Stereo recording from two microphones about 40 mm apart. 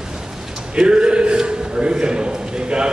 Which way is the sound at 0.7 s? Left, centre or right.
Right.